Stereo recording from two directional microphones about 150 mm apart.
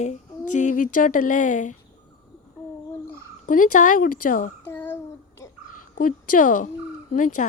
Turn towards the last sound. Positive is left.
turn(degrees=60)  # may be behind; listen again after turning